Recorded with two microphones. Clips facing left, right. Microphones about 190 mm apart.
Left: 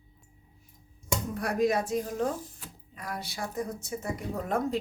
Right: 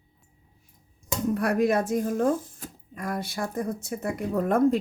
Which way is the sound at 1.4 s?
60° right (ahead or behind).